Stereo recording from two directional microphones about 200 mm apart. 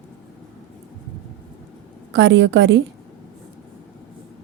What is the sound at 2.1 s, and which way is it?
Speech, 65° right (ahead or behind).